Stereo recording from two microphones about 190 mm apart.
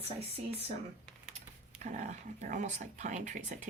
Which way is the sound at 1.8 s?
40° right (ahead or behind).